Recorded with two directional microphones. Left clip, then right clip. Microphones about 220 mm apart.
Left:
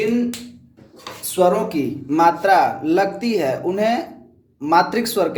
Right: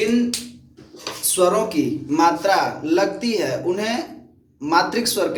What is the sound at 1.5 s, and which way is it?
Speech, 45° left (ahead or behind).